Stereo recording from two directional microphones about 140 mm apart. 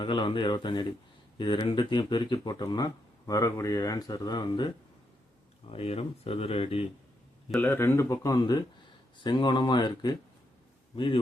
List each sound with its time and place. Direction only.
0.0 s speech: 35° left (ahead or behind)
5.7 s speech: 45° left (ahead or behind)
7.6 s speech: 15° left (ahead or behind); by 11.2 s 35° left (ahead or behind)